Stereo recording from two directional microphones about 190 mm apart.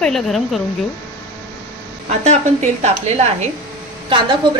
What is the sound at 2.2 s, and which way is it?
A woman's voice, 35° right (ahead or behind).